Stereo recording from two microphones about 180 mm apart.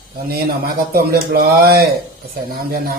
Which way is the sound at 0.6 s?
55° right (ahead or behind).